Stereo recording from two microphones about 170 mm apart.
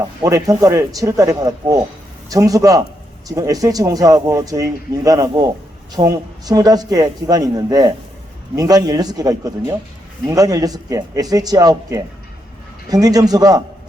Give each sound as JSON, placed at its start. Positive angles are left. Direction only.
{"t": 0.0, "sound": "a man's voice", "side_deg": -20}